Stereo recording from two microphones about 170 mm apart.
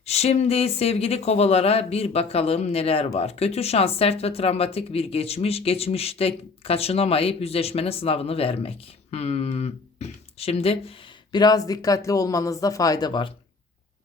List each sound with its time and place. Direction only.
0.0 s speech: 40° left (ahead or behind)